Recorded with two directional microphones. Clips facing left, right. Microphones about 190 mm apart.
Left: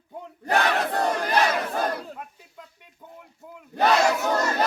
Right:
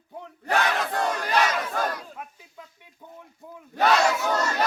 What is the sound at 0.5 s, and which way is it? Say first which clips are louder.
Battle cry: left 2 dB; 35° left (ahead or behind).